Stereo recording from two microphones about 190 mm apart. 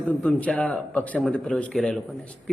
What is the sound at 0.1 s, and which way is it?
A man's voice, 5° left (ahead or behind).